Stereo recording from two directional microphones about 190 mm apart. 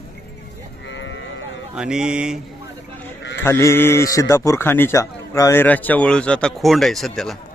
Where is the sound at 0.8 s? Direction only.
70° left (ahead or behind).